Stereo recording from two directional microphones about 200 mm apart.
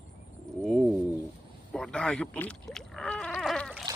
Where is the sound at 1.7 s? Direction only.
5° left (ahead or behind).